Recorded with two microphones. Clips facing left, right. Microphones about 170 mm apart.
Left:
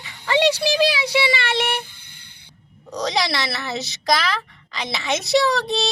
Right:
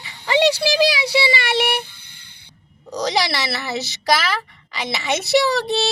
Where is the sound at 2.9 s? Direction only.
Centre (ahead or behind).